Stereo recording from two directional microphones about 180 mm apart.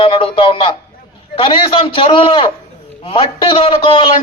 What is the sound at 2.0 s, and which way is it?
Speech, 30° left (ahead or behind).